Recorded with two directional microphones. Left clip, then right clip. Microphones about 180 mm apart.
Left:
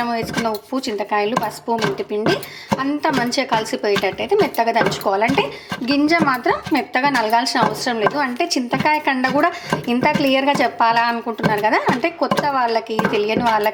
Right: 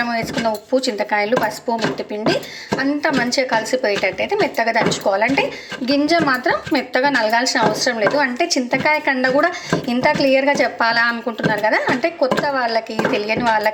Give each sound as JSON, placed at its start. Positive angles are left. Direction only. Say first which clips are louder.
{"t": 0.0, "sound": "a woman's voice", "louder": "right 1 dB", "side_deg": 25}